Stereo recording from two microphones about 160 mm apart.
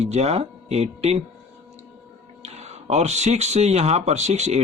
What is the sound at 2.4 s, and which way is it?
Speech, 45° right (ahead or behind).